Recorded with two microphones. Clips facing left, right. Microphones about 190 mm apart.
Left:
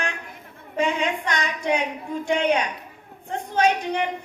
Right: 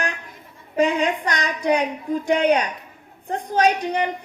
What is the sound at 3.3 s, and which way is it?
Speech, 35° right (ahead or behind).